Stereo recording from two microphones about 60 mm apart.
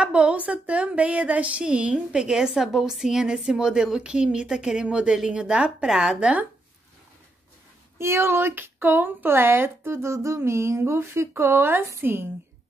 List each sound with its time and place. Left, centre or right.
0.0 s speech: centre
6.1 s speech: right
8.0 s a woman's voice: right